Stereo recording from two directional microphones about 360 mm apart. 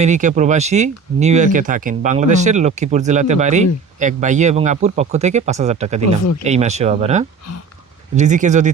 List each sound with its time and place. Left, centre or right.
0.0 s speech: centre